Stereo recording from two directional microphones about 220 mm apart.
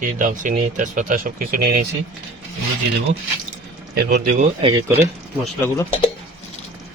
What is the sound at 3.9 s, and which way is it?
Speech, 50° right (ahead or behind).